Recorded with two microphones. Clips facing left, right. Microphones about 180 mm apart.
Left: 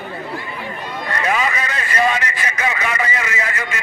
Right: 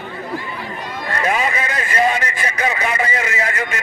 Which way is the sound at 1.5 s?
30° right (ahead or behind).